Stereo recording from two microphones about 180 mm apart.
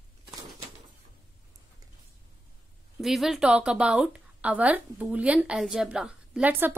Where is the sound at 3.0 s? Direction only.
Centre (ahead or behind).